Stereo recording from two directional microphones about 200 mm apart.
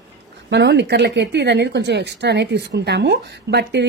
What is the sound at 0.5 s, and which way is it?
Speech, 60° right (ahead or behind).